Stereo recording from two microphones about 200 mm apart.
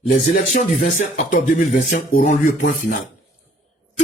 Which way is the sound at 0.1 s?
40° left (ahead or behind).